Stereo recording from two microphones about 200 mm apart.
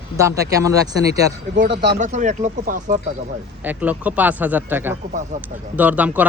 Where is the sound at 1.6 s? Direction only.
60° right (ahead or behind).